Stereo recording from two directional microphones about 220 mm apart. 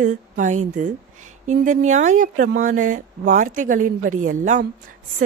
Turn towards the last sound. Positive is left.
turn(degrees=-35)  # may be behind; listen again after turning